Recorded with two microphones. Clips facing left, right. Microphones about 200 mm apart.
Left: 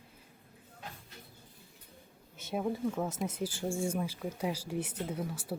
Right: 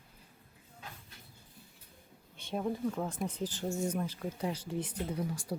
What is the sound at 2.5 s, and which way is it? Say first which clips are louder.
Speech: left 1 dB; 5° left (ahead or behind).